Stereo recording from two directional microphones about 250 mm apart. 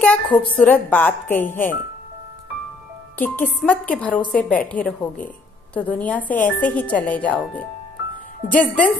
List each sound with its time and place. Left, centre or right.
0.0 s speech: centre
3.2 s a woman's voice: centre